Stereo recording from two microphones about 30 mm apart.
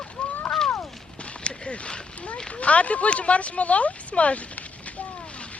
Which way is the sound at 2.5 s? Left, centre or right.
Left.